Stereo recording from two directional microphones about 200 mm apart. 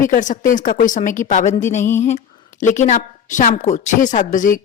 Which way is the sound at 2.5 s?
35° left (ahead or behind).